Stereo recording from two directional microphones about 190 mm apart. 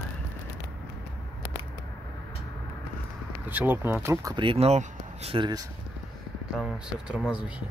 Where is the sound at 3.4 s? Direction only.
10° right (ahead or behind).